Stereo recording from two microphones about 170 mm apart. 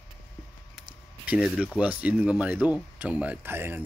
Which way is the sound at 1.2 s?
5° right (ahead or behind).